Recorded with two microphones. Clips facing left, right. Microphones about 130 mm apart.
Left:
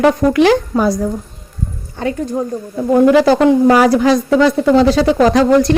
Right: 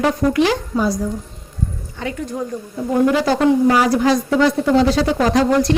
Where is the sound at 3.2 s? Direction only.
80° left.